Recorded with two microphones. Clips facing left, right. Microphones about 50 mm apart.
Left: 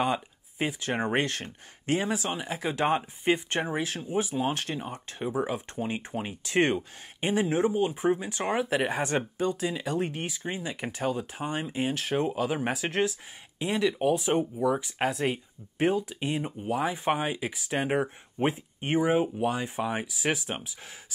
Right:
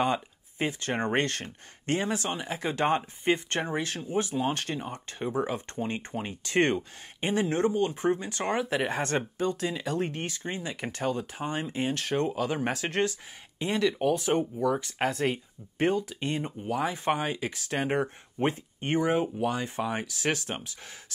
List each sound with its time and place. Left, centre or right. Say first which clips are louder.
0.0 s speech: even; centre